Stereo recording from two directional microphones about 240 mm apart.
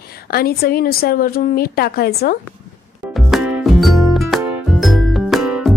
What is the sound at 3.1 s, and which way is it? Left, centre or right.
Music, centre.